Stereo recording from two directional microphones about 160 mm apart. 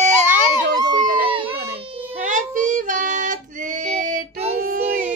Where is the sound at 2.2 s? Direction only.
55° right (ahead or behind).